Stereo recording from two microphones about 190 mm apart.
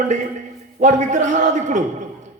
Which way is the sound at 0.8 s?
40° right (ahead or behind).